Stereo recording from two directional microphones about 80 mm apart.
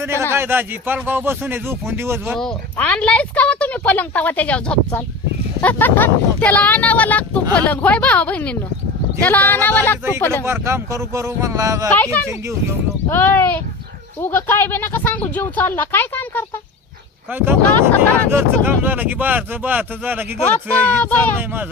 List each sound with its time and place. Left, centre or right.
0.1 s speech: right
2.7 s a woman's voice: centre
10.4 s speech: right
13.1 s speech: left
17.3 s speech: right
20.5 s speech: centre